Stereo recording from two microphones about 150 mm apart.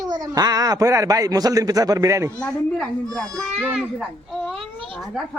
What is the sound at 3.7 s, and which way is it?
A child's voice, 5° right (ahead or behind).